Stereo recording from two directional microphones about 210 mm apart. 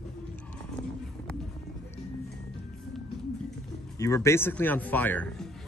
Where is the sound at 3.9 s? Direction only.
15° left (ahead or behind).